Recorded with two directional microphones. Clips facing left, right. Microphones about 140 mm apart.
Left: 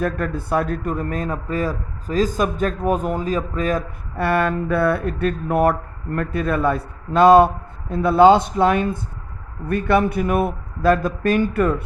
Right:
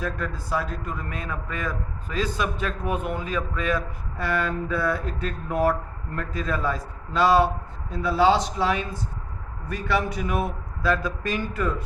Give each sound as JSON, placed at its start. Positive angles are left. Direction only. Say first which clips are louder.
{"t": 0.0, "sound": "a man's voice", "louder": "left 7 dB", "side_deg": 55}
{"t": 4.2, "sound": "speech", "louder": "left 7 dB", "side_deg": 60}